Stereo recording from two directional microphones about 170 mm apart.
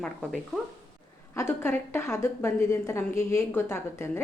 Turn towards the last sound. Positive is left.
turn(degrees=15)  # may be behind; listen again after turning